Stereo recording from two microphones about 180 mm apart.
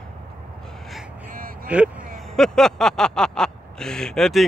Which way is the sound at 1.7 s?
5° right (ahead or behind).